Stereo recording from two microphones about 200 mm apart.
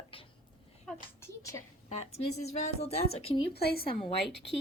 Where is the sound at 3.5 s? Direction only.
50° left (ahead or behind).